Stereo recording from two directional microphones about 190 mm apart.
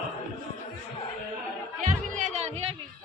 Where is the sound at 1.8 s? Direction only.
40° right (ahead or behind).